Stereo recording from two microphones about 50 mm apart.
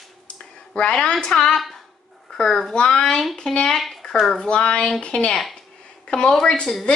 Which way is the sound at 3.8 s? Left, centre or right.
Centre.